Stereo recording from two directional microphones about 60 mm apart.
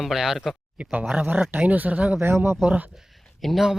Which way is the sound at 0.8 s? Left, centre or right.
Right.